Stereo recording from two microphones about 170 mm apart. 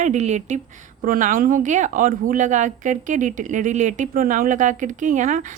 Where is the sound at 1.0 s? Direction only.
55° right (ahead or behind).